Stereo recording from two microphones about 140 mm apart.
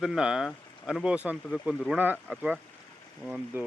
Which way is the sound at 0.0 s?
5° right (ahead or behind).